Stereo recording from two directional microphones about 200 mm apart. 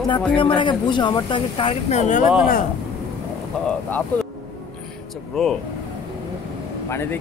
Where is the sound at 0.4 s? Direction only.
25° left (ahead or behind).